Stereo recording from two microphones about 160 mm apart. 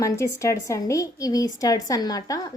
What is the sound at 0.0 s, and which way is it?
A woman's voice, 20° left (ahead or behind).